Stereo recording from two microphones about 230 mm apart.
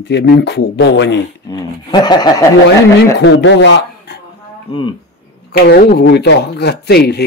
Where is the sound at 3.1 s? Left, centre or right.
Left.